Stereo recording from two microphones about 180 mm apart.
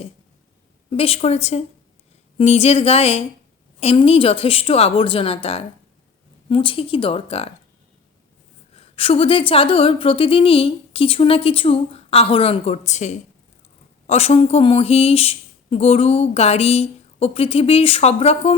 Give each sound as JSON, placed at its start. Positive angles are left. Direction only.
{"t": 0.9, "sound": "a woman's voice", "side_deg": 30}
{"t": 8.7, "sound": "a woman's voice", "side_deg": 30}